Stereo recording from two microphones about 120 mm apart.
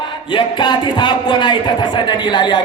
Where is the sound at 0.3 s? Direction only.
40° left (ahead or behind).